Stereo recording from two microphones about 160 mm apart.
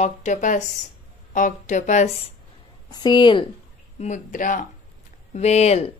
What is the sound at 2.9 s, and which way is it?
Speech, 25° left (ahead or behind).